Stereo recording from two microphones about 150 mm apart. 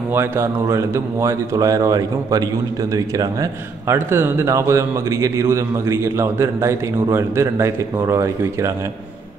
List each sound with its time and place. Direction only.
0.1 s a man's voice: 15° right (ahead or behind)
3.9 s a man's voice: 15° right (ahead or behind)